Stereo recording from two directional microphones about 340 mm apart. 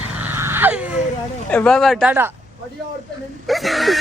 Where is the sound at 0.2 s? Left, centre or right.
Centre.